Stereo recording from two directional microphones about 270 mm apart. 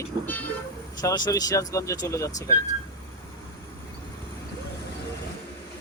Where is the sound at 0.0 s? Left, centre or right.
Centre.